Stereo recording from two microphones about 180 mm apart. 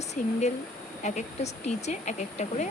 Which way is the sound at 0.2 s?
45° left (ahead or behind).